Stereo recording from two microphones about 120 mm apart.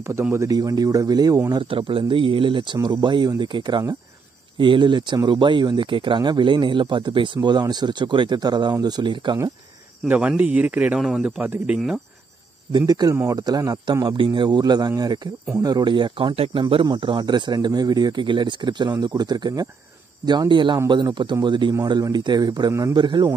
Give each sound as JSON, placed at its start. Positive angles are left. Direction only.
{"t": 0.3, "sound": "speech", "side_deg": -25}
{"t": 1.6, "sound": "speech", "side_deg": -45}
{"t": 10.0, "sound": "speech", "side_deg": -10}
{"t": 12.7, "sound": "speech", "side_deg": -35}
{"t": 13.1, "sound": "speech", "side_deg": -20}
{"t": 13.4, "sound": "speech", "side_deg": -30}
{"t": 22.9, "sound": "speech", "side_deg": -35}